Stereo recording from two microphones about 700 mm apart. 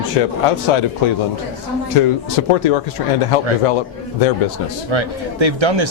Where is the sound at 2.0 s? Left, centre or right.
Left.